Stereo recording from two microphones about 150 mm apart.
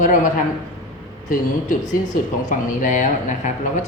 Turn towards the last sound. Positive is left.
turn(degrees=55)  # may be behind; listen again after turning